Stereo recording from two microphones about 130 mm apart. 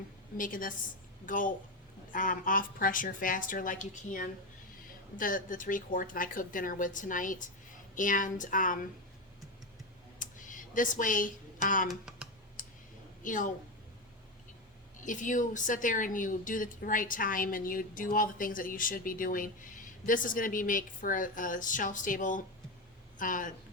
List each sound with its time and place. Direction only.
0.3 s a woman's voice: 90° left
10.2 s a sound: 90° left
11.9 s a sound: 5° right (ahead or behind)
12.6 s clicking: 90° left
13.2 s a woman's voice: 85° left
15.0 s a woman's voice: 80° left